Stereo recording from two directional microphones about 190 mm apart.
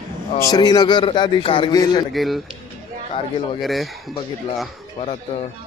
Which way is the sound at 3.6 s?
Centre (ahead or behind).